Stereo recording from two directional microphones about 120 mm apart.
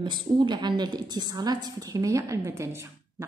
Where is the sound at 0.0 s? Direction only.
40° right (ahead or behind).